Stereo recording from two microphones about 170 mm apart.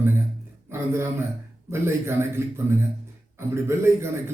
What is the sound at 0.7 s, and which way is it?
A man's voice, 15° right (ahead or behind).